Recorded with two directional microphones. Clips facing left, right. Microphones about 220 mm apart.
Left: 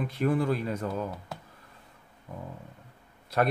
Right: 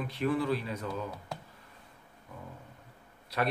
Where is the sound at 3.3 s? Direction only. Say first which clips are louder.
Left 5 dB; 45° left (ahead or behind).